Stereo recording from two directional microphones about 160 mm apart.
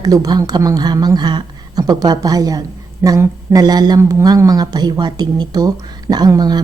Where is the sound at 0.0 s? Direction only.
25° right (ahead or behind).